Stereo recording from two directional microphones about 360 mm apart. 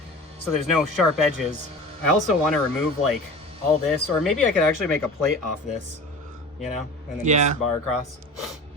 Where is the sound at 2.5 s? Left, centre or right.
Centre.